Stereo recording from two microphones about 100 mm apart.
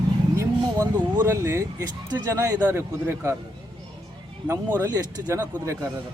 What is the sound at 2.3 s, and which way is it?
A man's voice, 25° right (ahead or behind).